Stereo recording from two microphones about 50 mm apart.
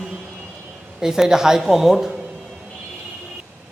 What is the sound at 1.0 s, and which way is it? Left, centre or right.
Speech, centre.